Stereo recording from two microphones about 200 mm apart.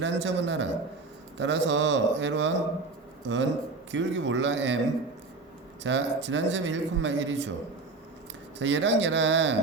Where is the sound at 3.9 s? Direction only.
65° right (ahead or behind).